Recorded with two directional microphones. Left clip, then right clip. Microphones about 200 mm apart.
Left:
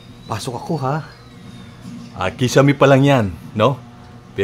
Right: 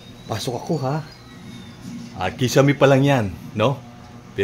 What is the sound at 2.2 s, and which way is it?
Speech, 20° left (ahead or behind).